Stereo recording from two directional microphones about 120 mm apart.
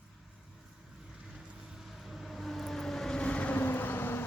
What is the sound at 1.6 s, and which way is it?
Vehicle, centre (ahead or behind).